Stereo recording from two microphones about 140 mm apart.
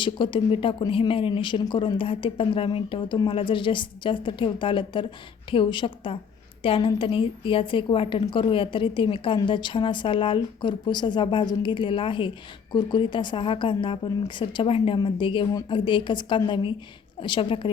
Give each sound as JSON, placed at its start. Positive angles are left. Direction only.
{"t": 0.0, "sound": "a woman's voice", "side_deg": 35}